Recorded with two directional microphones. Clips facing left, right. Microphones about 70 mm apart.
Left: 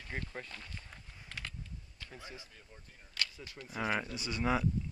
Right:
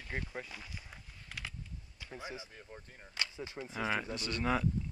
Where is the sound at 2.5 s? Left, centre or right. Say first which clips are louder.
Right 6 dB; right.